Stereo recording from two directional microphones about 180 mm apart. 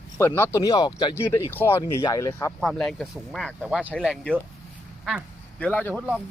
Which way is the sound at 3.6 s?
5° right (ahead or behind).